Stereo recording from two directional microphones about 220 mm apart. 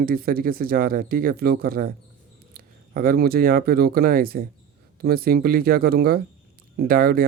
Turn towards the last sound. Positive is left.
turn(degrees=-40)  # may be behind; listen again after turning